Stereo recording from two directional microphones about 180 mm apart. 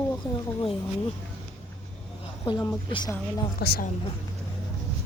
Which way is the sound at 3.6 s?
60° left (ahead or behind).